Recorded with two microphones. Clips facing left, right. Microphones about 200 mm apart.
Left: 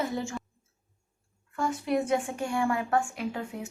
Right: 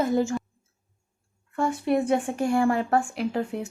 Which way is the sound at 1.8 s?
55° right (ahead or behind).